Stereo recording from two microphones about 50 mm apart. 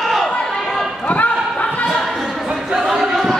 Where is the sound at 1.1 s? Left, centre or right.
Left.